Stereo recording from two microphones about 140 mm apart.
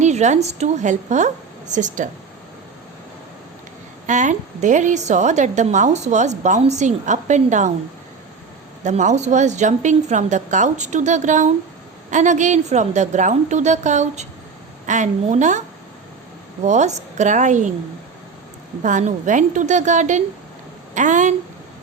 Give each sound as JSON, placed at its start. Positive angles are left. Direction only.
{"t": 0.0, "sound": "a woman's voice", "side_deg": -55}
{"t": 4.0, "sound": "a woman's voice", "side_deg": -60}
{"t": 8.8, "sound": "a woman's voice", "side_deg": -60}
{"t": 16.6, "sound": "a woman's voice", "side_deg": -55}
{"t": 18.8, "sound": "a woman's voice", "side_deg": -60}